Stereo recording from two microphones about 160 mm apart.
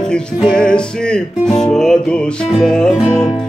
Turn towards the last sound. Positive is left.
turn(degrees=5)  # may be behind; listen again after turning